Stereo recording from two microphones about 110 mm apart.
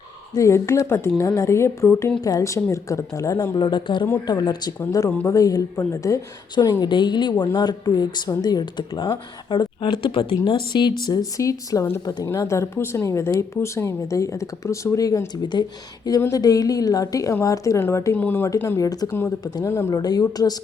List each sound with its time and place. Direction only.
0.3 s speech: 25° left (ahead or behind)
3.6 s speech: 45° left (ahead or behind)
6.8 s speech: 45° left (ahead or behind)